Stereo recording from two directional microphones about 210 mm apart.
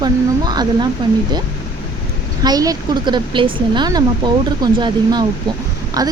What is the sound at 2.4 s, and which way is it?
Speech, 20° right (ahead or behind).